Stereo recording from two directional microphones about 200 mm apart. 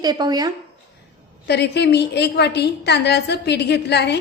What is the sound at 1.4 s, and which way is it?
A woman's voice, 55° left (ahead or behind).